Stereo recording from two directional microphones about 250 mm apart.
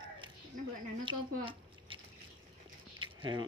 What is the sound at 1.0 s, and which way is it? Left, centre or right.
Speech, centre.